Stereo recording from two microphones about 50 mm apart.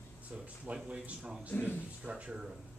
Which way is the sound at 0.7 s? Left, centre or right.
Right.